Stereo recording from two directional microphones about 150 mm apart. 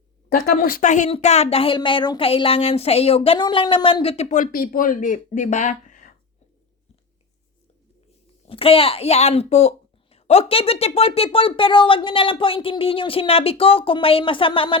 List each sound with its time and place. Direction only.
0.3 s a woman's voice: 80° left; by 4.4 s 50° left (ahead or behind)
4.5 s speech: 75° left (ahead or behind); by 6.1 s 55° left (ahead or behind)
8.4 s a woman's voice: 40° left (ahead or behind)